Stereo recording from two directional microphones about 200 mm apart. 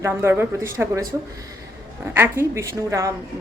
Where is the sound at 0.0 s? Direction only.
10° right (ahead or behind).